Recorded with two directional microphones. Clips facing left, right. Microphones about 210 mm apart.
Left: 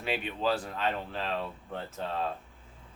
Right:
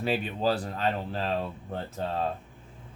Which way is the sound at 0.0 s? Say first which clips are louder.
Right 4 dB; 40° right (ahead or behind).